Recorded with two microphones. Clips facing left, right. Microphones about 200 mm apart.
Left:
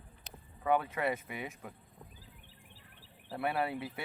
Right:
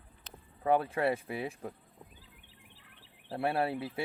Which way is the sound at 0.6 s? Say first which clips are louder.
Right 3 dB; 30° right (ahead or behind).